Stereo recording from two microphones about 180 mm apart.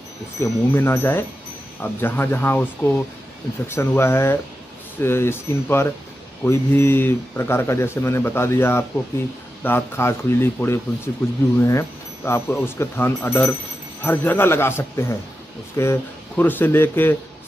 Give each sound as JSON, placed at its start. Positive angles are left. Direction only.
{"t": 0.4, "sound": "speech", "side_deg": 15}